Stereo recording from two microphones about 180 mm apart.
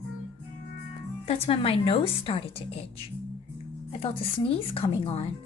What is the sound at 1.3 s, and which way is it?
A woman's voice, 35° left (ahead or behind).